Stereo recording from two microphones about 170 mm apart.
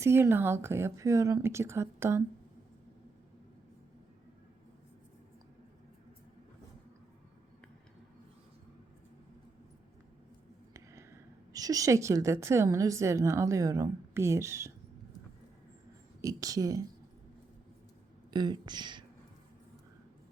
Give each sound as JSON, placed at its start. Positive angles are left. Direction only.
{"t": 0.0, "sound": "a woman's voice", "side_deg": -15}
{"t": 10.8, "sound": "a woman's voice", "side_deg": -15}
{"t": 16.2, "sound": "speech", "side_deg": -20}
{"t": 18.3, "sound": "speech", "side_deg": -25}